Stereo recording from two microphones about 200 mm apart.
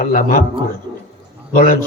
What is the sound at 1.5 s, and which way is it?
Speech, 45° left (ahead or behind).